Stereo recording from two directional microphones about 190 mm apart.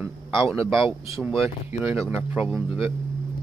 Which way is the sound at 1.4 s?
10° right (ahead or behind).